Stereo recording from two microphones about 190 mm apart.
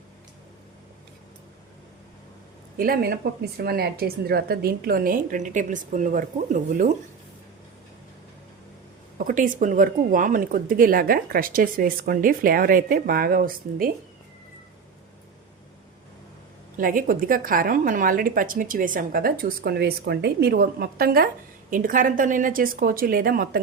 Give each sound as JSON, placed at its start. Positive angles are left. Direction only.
{"t": 2.7, "sound": "speech", "side_deg": -50}
{"t": 9.1, "sound": "speech", "side_deg": -45}
{"t": 16.7, "sound": "speech", "side_deg": -45}